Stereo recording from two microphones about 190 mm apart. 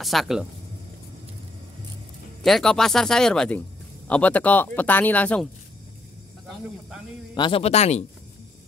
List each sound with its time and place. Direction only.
0.0 s speech: centre (ahead or behind)
2.4 s speech: centre (ahead or behind)
7.3 s a man's voice: 25° left (ahead or behind)